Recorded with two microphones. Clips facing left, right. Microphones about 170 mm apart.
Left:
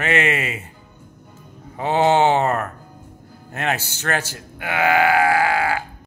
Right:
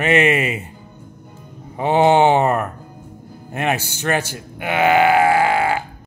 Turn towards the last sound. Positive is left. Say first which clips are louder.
# right 3 dB
turn(degrees=-25)  # may be behind; listen again after turning